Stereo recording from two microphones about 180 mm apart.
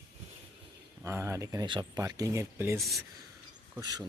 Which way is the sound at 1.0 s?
15° right (ahead or behind).